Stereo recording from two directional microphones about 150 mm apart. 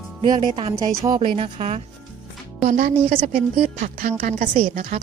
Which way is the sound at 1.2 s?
45° right (ahead or behind).